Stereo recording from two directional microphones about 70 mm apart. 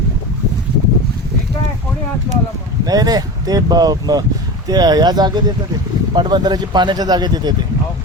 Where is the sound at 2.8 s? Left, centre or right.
Right.